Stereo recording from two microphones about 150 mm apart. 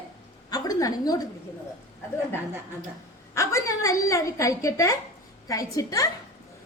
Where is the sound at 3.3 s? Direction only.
20° left (ahead or behind).